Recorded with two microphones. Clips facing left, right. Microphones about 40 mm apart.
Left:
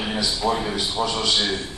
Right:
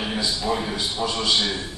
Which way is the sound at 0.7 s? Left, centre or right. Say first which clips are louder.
Left 2 dB; left.